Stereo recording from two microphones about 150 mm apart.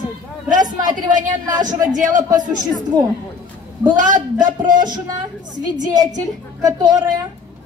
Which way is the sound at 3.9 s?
60° right (ahead or behind).